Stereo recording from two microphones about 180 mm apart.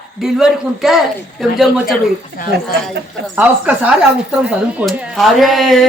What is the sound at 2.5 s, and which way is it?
Speech, 65° right (ahead or behind).